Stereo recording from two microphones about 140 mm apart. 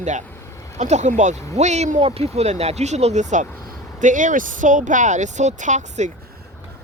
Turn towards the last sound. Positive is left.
turn(degrees=-60)  # may be behind; listen again after turning